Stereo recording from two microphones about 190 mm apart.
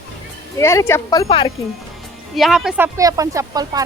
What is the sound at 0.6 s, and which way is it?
Speech, 15° left (ahead or behind).